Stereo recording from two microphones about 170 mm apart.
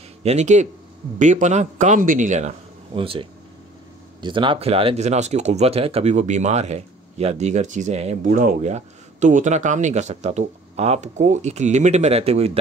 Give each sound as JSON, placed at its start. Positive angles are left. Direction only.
{"t": 0.2, "sound": "a man's voice", "side_deg": -40}